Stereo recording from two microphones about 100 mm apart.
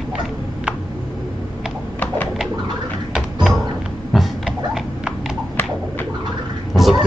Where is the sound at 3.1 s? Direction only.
5° right (ahead or behind).